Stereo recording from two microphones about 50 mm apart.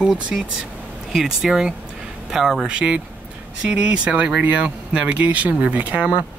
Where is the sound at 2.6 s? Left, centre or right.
Right.